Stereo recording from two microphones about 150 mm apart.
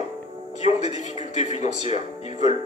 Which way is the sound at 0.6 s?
50° left (ahead or behind).